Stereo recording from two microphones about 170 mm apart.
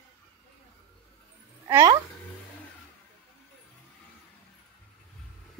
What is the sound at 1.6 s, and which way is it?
Speech, 15° right (ahead or behind).